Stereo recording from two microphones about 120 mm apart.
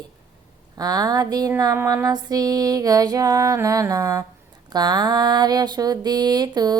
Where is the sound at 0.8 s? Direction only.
30° right (ahead or behind).